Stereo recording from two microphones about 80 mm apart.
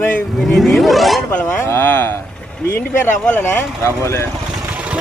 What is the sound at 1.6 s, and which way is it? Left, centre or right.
Speech, left.